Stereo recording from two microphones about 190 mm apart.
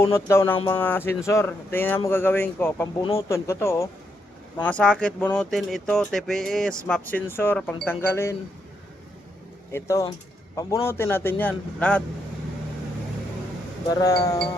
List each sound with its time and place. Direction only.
0.1 s speech: 15° left (ahead or behind)
9.7 s speech: 15° left (ahead or behind)
13.9 s speech: 15° left (ahead or behind)